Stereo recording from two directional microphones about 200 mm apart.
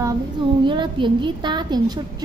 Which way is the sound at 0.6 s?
25° right (ahead or behind).